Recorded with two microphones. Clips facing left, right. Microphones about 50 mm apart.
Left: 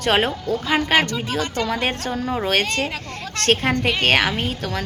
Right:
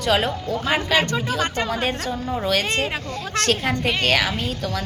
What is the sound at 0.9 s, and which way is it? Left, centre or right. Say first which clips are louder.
Speech: left 2 dB; left.